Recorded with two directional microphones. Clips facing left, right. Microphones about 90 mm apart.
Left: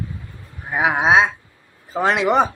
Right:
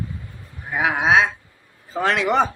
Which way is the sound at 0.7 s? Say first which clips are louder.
Left 2 dB; 20° left (ahead or behind).